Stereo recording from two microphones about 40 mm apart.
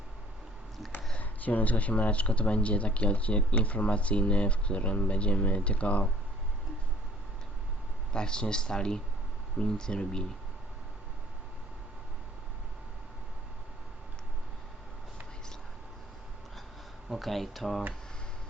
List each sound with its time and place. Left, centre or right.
1.2 s speech: left
8.1 s speech: centre
17.1 s speech: centre